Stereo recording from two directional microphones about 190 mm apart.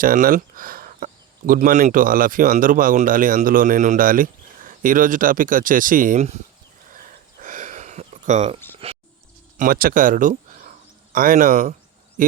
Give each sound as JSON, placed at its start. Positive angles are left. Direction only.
{"t": 0.0, "sound": "speech", "side_deg": -45}
{"t": 6.9, "sound": "a sound", "side_deg": -45}
{"t": 9.6, "sound": "speech", "side_deg": -50}